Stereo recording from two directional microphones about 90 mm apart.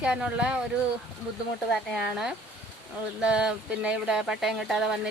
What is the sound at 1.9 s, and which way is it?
Speech, 5° right (ahead or behind).